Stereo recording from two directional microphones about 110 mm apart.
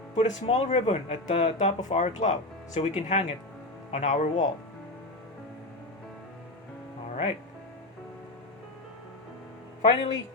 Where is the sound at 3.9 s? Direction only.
70° left (ahead or behind).